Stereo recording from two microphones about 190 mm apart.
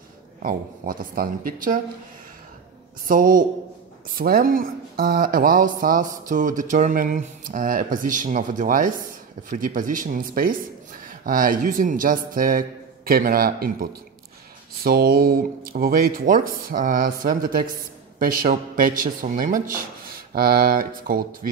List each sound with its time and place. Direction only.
0.4 s speech: 50° right (ahead or behind)
3.1 s speech: 45° right (ahead or behind)